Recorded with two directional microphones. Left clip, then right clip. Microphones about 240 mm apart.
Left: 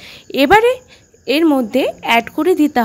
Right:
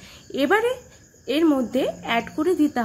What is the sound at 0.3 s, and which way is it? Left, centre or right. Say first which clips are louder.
A woman's voice: left 10 dB; left.